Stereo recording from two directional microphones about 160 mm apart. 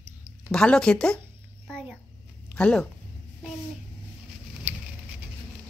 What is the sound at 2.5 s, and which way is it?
Speech, 5° left (ahead or behind).